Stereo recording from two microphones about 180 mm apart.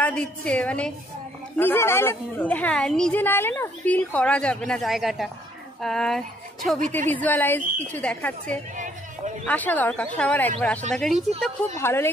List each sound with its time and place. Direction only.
0.0 s a woman's voice: 5° left (ahead or behind)
8.7 s a sound: 45° right (ahead or behind)
9.5 s a woman's voice: 10° left (ahead or behind)
11.7 s a woman's voice: 15° left (ahead or behind)